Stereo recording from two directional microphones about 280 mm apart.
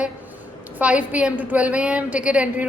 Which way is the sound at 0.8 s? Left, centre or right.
Centre.